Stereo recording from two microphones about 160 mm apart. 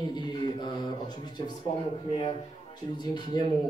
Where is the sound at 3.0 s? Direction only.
25° left (ahead or behind).